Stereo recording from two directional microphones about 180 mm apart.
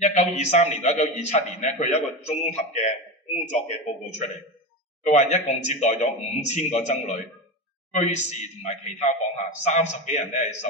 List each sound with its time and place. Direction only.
0.0 s a man's voice: 40° left (ahead or behind)
5.0 s a man's voice: 40° left (ahead or behind)